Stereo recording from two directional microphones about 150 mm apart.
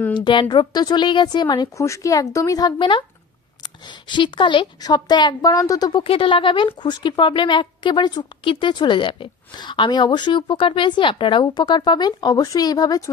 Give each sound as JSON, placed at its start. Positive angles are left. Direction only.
{"t": 0.1, "sound": "a woman's voice", "side_deg": 30}